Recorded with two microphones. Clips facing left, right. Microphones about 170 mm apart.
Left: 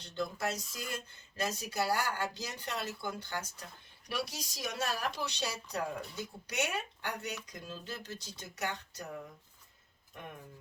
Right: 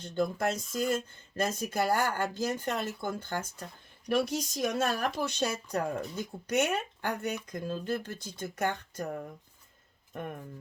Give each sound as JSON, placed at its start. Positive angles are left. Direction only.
{"t": 0.0, "sound": "speech", "side_deg": -50}